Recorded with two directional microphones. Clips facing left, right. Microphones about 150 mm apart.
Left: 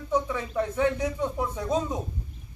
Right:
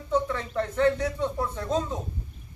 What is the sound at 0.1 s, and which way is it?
A man's voice, 10° left (ahead or behind).